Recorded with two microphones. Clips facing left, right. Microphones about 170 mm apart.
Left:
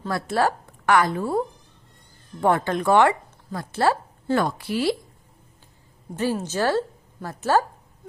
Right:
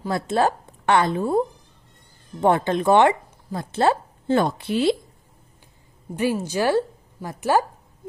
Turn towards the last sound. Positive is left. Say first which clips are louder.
# right 1 dB
turn(degrees=-15)  # may be behind; listen again after turning